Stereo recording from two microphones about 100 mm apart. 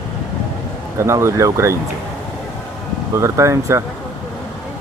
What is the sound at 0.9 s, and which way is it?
Speech, 30° right (ahead or behind).